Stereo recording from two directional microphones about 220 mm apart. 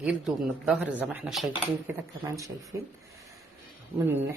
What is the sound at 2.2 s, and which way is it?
Speech, 15° right (ahead or behind).